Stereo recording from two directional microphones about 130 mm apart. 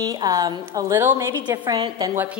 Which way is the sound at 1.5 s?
35° right (ahead or behind).